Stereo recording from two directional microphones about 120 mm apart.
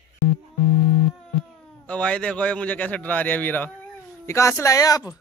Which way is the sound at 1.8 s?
10° left (ahead or behind).